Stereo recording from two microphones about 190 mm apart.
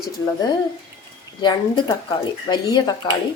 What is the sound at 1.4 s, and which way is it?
Speech, 25° left (ahead or behind).